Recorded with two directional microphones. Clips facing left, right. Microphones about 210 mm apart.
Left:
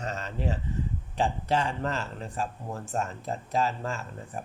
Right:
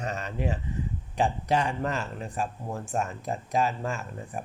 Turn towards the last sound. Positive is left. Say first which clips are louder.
# right 2 dB
turn(degrees=-15)  # may be behind; listen again after turning